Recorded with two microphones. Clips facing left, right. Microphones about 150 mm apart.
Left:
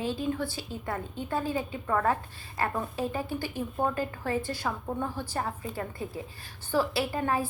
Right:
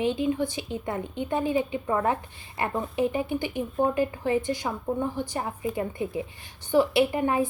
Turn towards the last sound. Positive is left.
turn(degrees=-20)  # may be behind; listen again after turning